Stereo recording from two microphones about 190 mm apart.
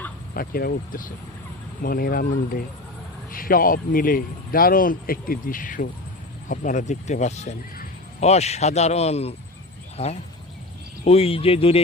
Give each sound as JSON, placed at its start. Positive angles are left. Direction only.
{"t": 0.3, "sound": "a man's voice", "side_deg": 50}
{"t": 11.0, "sound": "a man's voice", "side_deg": 30}